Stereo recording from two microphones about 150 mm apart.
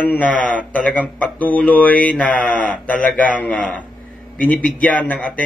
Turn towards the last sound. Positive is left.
turn(degrees=10)  # may be behind; listen again after turning